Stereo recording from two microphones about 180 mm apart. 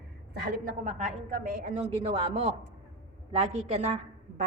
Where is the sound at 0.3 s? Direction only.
55° right (ahead or behind).